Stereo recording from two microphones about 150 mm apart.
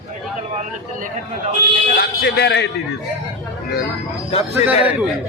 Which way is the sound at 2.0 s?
90° left.